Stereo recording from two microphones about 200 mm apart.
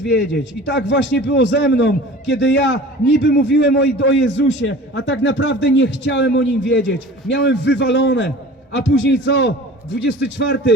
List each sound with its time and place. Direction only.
0.0 s a man's voice: 65° left (ahead or behind)